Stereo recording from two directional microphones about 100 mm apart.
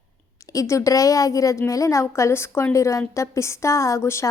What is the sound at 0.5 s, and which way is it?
A woman's voice, 30° left (ahead or behind).